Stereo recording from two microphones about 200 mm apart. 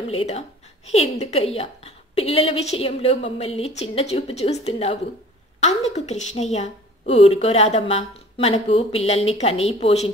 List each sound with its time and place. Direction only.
0.1 s a woman's voice: 30° left (ahead or behind)